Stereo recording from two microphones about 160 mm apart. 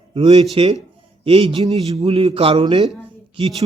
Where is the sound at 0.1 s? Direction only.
35° right (ahead or behind).